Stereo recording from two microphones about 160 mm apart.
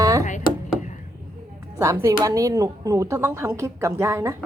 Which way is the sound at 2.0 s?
20° right (ahead or behind).